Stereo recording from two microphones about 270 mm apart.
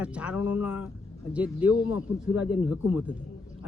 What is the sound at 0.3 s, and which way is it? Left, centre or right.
Speech, left.